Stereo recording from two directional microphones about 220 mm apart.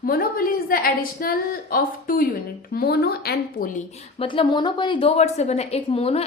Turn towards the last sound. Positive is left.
turn(degrees=25)  # may be behind; listen again after turning